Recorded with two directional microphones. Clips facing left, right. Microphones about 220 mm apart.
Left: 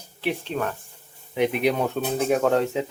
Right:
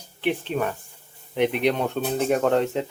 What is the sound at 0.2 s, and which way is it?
Speech, centre (ahead or behind).